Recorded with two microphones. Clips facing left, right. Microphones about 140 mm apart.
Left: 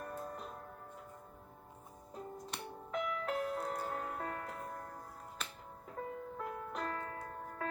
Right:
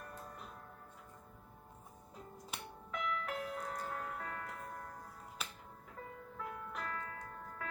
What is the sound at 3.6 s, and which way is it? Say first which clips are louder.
Music: left 3 dB; 30° left (ahead or behind).